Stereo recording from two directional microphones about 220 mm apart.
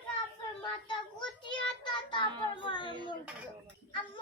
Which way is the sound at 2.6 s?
20° left (ahead or behind).